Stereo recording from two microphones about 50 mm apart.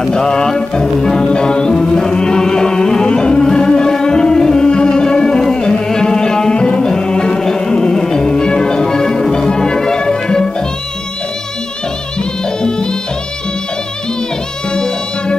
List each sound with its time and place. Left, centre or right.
0.0 s music: centre
14.7 s music: centre